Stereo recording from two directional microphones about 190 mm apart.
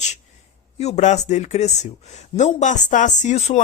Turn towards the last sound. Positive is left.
turn(degrees=40)  # may be behind; listen again after turning